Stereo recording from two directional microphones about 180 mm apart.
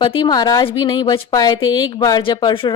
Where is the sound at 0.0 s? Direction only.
25° left (ahead or behind).